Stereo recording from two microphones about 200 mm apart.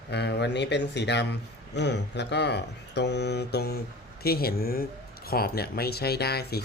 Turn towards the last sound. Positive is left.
turn(degrees=50)  # may be behind; listen again after turning